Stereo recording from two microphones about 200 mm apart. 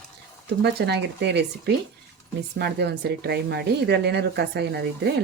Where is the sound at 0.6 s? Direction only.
60° right (ahead or behind).